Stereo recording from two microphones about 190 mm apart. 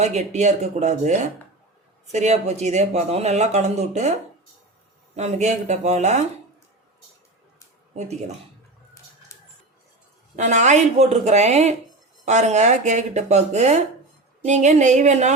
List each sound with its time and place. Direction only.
0.0 s speech: 35° right (ahead or behind)
5.1 s speech: 35° right (ahead or behind)
9.3 s a sound: 15° left (ahead or behind)
10.3 s speech: 40° right (ahead or behind)